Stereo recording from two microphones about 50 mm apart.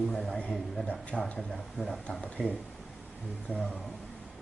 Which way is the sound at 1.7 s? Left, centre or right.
Centre.